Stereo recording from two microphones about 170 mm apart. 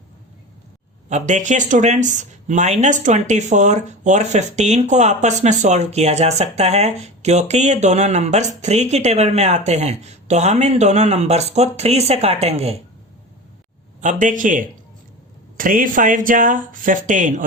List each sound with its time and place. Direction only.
1.1 s speech: 45° right (ahead or behind)
14.0 s speech: 45° right (ahead or behind)